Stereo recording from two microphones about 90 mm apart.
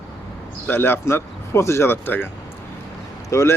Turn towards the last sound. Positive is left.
turn(degrees=30)  # may be behind; listen again after turning